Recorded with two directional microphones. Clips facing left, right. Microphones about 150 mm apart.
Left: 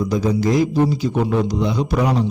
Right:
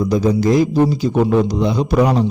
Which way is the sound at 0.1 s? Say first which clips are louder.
Right 4 dB; 35° right (ahead or behind).